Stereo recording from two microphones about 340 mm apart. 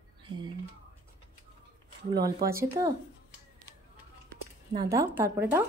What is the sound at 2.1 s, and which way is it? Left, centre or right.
Speech, right.